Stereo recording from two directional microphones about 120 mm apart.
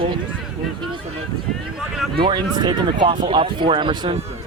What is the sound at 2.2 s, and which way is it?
Speech, 40° right (ahead or behind).